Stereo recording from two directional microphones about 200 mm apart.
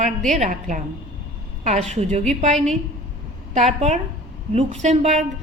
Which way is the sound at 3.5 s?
35° right (ahead or behind).